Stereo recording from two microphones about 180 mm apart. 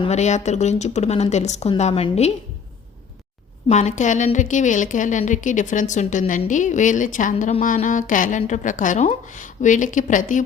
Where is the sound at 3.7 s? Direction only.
40° left (ahead or behind).